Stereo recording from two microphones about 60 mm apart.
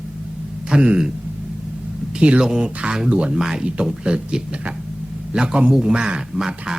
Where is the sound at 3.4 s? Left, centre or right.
Centre.